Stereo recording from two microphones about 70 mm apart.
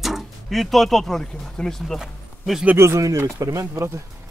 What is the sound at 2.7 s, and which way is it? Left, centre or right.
Speech, right.